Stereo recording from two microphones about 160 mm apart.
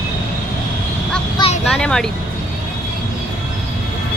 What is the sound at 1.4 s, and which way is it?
Vehicle, 25° left (ahead or behind).